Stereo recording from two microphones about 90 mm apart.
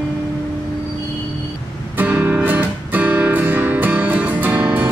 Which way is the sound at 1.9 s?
20° right (ahead or behind).